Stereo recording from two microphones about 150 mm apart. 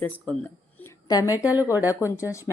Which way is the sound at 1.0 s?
25° left (ahead or behind).